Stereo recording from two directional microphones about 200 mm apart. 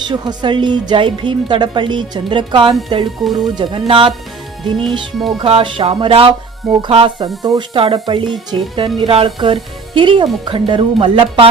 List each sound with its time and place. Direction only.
0.1 s speech: 25° right (ahead or behind)
4.6 s speech: centre (ahead or behind)
5.4 s speech: 25° right (ahead or behind)